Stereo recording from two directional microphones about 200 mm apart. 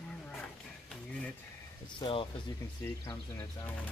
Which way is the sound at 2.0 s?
25° left (ahead or behind).